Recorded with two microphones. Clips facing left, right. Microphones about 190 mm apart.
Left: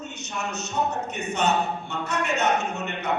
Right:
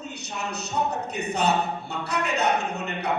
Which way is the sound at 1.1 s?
35° right (ahead or behind).